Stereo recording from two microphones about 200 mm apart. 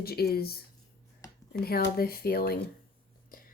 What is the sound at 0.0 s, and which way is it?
Speech, 50° left (ahead or behind).